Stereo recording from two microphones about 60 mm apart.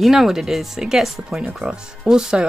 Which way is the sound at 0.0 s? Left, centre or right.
Centre.